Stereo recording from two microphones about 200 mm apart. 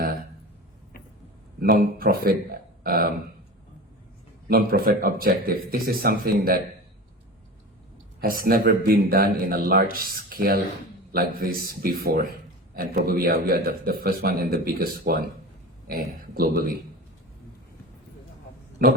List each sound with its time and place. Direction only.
1.8 s speech: 45° right (ahead or behind)
4.4 s a man's voice: 50° right (ahead or behind)
8.2 s a man's voice: 45° right (ahead or behind)